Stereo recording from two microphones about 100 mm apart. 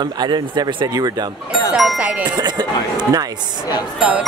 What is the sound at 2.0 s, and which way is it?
Speech, 15° right (ahead or behind).